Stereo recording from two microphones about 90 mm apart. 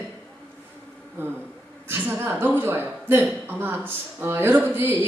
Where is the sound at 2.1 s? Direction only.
25° right (ahead or behind).